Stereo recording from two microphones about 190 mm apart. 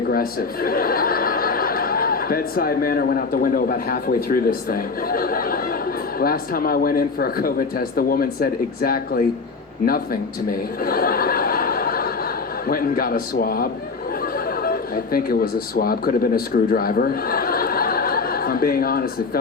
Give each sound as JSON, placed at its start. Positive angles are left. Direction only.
{"t": 0.1, "sound": "speech", "side_deg": 50}
{"t": 10.8, "sound": "a sound", "side_deg": 50}
{"t": 12.6, "sound": "speech", "side_deg": 50}